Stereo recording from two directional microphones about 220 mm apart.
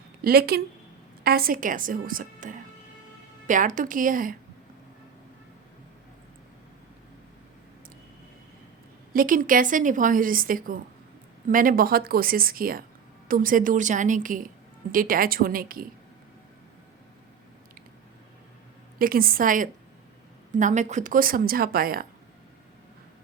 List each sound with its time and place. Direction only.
0.2 s a woman's voice: 45° right (ahead or behind)
9.1 s a woman's voice: 40° right (ahead or behind)
18.9 s a woman's voice: 40° right (ahead or behind)